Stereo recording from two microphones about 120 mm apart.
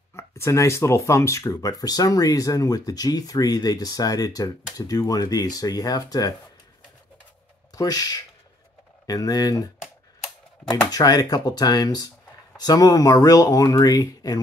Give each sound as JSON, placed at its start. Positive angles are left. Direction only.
{"t": 0.1, "sound": "speech", "side_deg": 25}
{"t": 7.7, "sound": "speech", "side_deg": 30}
{"t": 10.9, "sound": "speech", "side_deg": 30}